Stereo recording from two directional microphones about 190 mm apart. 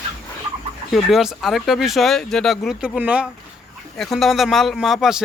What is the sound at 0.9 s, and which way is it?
Speech, centre (ahead or behind).